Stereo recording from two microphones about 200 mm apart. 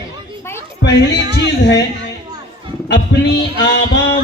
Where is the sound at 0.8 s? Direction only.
60° left (ahead or behind).